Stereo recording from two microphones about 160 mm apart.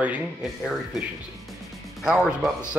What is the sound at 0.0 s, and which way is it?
Speech, 5° right (ahead or behind).